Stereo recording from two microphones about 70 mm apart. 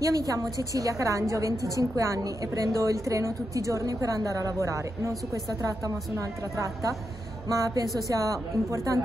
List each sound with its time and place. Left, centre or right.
0.0 s a woman's voice: right